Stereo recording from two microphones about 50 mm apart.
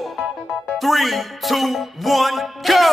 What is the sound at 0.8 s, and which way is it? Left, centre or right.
Music, centre.